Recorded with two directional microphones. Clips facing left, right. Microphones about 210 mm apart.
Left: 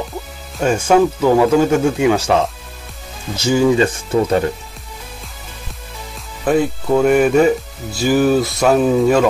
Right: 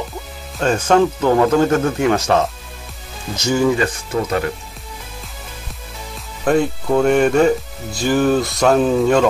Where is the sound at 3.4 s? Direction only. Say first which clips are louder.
Left 2 dB; 15° left (ahead or behind).